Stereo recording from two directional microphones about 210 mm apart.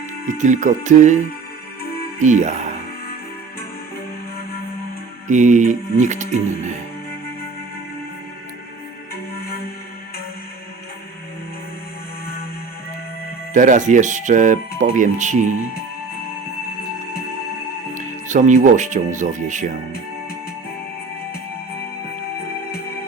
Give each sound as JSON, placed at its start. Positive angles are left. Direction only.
{"t": 0.3, "sound": "music", "side_deg": -35}
{"t": 2.1, "sound": "speech", "side_deg": -35}
{"t": 5.3, "sound": "music", "side_deg": -35}
{"t": 13.5, "sound": "music", "side_deg": -35}
{"t": 17.9, "sound": "speech", "side_deg": -35}